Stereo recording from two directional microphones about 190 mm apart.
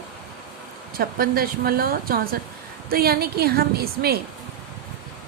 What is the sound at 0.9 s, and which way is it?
A woman's voice, 50° right (ahead or behind).